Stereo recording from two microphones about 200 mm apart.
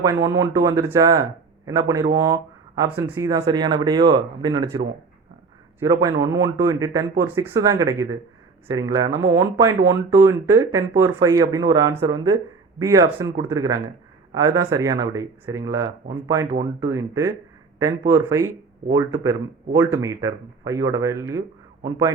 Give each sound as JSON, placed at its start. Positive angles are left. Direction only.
{"t": 0.0, "sound": "speech", "side_deg": -15}
{"t": 5.8, "sound": "speech", "side_deg": -15}